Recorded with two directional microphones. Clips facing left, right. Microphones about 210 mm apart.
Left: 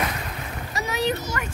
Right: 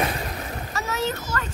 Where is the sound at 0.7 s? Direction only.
15° left (ahead or behind).